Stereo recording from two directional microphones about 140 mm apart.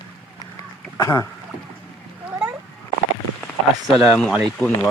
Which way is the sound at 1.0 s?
25° left (ahead or behind).